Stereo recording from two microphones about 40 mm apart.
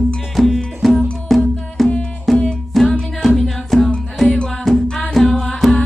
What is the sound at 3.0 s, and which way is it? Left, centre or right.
Music, centre.